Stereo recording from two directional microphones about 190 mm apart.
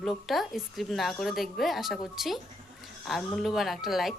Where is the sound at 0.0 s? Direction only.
Centre (ahead or behind).